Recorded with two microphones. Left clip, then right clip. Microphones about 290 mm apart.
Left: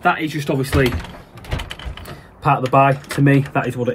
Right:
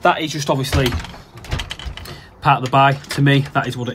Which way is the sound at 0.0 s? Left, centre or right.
Centre.